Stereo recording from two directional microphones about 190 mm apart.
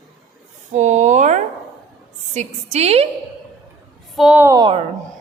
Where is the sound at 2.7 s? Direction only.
35° right (ahead or behind).